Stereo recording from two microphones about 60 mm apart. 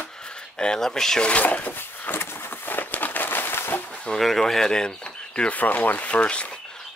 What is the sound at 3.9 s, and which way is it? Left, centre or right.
Speech, centre.